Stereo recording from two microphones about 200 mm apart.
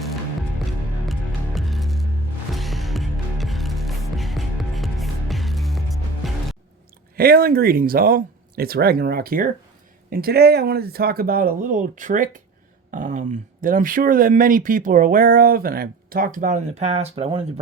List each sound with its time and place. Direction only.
1.5 s music: centre (ahead or behind)
7.2 s speech: 50° right (ahead or behind); by 17.4 s 30° right (ahead or behind)